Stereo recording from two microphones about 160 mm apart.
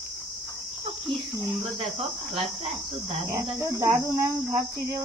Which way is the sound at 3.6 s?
20° right (ahead or behind).